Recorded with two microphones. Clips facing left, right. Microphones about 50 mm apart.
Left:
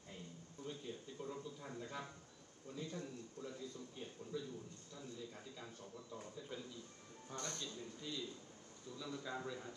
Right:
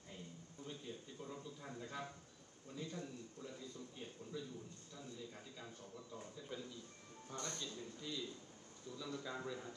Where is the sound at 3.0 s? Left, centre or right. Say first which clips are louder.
Left 1 dB; right.